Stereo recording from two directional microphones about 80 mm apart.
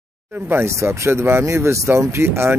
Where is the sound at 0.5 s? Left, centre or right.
Right.